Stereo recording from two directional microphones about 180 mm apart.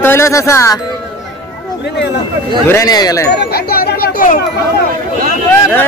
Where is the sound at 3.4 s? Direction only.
60° left (ahead or behind).